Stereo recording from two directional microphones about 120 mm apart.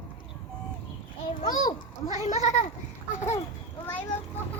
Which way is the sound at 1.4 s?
30° left (ahead or behind).